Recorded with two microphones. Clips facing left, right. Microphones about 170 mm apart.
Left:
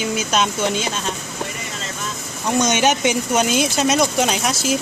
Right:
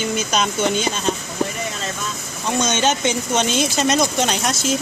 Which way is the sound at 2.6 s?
15° left (ahead or behind).